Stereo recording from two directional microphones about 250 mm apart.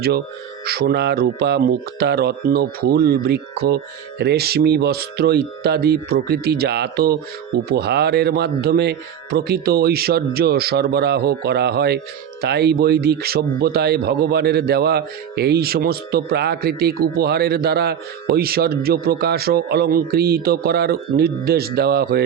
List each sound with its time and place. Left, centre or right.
0.6 s speech: right